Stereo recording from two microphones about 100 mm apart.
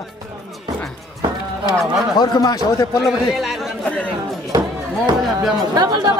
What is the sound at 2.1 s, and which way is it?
Speech, 40° left (ahead or behind).